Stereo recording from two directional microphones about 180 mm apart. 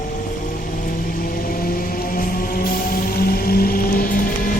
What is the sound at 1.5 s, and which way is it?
Music, 50° left (ahead or behind).